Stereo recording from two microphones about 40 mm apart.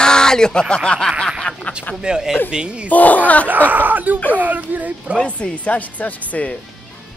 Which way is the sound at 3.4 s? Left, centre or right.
Right.